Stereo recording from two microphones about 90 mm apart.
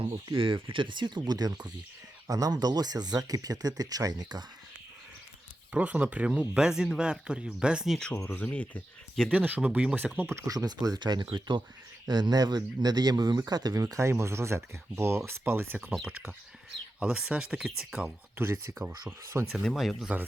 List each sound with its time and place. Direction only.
0.3 s speech: 75° right (ahead or behind); by 4.4 s 50° right (ahead or behind)
5.7 s speech: 15° right (ahead or behind)
8.1 s speech: 30° left (ahead or behind)
8.4 s speech: 15° left (ahead or behind)
9.3 s speech: 20° right (ahead or behind); by 13.8 s 45° right (ahead or behind)
13.8 s speech: 30° right (ahead or behind)
15.8 s speech: 10° right (ahead or behind)
18.3 s speech: 30° right (ahead or behind)
19.6 s speech: centre (ahead or behind)